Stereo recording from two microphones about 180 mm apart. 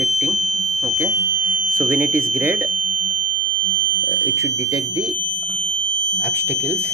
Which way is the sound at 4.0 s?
10° right (ahead or behind).